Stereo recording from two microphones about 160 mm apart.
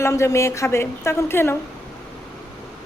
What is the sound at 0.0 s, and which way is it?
Speech, 20° left (ahead or behind).